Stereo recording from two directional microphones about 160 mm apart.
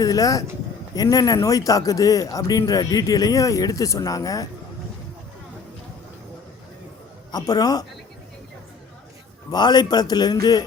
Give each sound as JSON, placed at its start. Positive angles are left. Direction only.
{"t": 0.0, "sound": "speech", "side_deg": 20}
{"t": 7.3, "sound": "speech", "side_deg": 25}
{"t": 9.5, "sound": "speech", "side_deg": 25}